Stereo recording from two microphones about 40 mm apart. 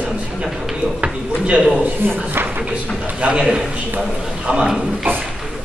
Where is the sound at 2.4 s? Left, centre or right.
Right.